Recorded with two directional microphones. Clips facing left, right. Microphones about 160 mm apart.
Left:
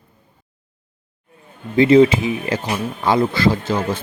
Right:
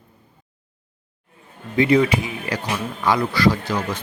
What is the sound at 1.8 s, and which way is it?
A man's voice, 25° left (ahead or behind).